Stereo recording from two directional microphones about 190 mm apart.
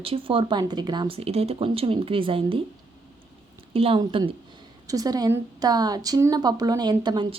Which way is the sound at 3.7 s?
30° right (ahead or behind).